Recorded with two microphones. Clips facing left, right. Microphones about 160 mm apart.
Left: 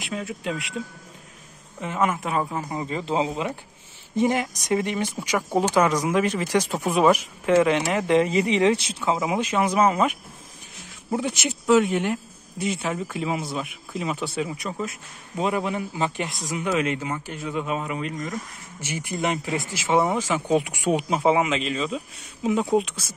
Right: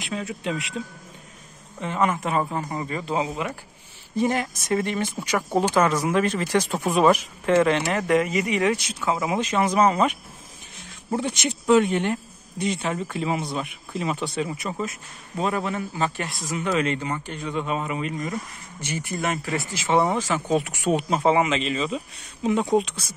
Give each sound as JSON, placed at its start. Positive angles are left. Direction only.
{"t": 0.0, "sound": "speech", "side_deg": 0}
{"t": 2.8, "sound": "a man's voice", "side_deg": 20}
{"t": 9.2, "sound": "speech", "side_deg": 10}
{"t": 15.3, "sound": "speech", "side_deg": 15}
{"t": 18.8, "sound": "speech", "side_deg": 10}